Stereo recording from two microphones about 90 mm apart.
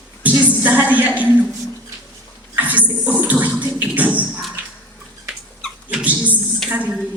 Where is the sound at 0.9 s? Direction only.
15° right (ahead or behind).